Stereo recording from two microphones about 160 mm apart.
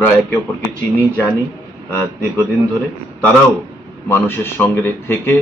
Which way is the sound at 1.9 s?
10° left (ahead or behind).